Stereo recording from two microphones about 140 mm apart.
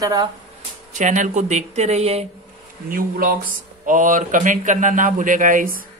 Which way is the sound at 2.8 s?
90° right.